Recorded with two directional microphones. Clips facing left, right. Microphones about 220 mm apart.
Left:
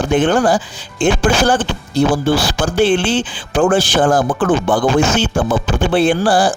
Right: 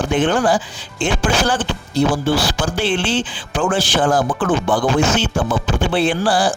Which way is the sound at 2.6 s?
50° left (ahead or behind).